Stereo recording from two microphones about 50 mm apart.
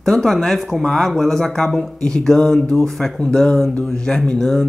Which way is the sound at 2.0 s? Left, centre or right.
Centre.